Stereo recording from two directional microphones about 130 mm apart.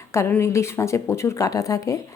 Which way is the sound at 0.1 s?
20° left (ahead or behind).